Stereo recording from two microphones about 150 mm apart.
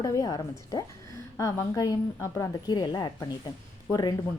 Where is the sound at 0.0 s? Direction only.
25° left (ahead or behind).